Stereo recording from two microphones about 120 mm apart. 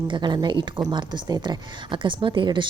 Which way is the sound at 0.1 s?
40° right (ahead or behind).